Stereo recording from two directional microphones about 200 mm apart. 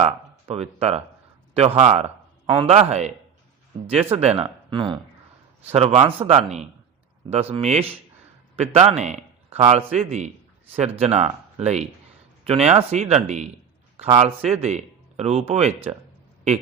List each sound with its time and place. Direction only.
0.0 s speech: 30° right (ahead or behind)
4.1 s a man's voice: 30° right (ahead or behind)